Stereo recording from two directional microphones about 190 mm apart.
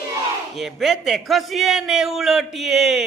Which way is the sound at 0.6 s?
Centre (ahead or behind).